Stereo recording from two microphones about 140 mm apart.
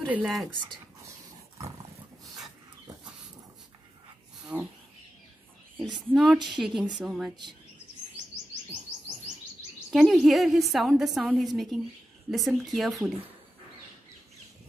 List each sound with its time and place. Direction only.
0.1 s a woman's voice: 5° right (ahead or behind)
4.5 s a sound: 5° right (ahead or behind)
5.9 s a woman's voice: centre (ahead or behind)
6.3 s a woman's voice: 35° right (ahead or behind)
6.6 s a woman's voice: centre (ahead or behind)
9.8 s a woman's voice: 5° right (ahead or behind)